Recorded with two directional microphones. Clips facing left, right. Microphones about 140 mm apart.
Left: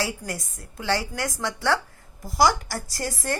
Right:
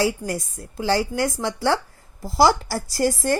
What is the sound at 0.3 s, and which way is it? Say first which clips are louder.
A woman's voice: right 6 dB; 30° right (ahead or behind).